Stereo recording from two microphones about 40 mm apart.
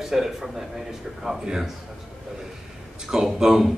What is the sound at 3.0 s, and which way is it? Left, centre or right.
Speech, centre.